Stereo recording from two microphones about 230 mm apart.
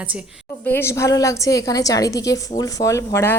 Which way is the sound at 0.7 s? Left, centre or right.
Centre.